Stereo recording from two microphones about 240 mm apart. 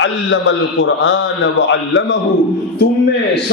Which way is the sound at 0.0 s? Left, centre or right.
Left.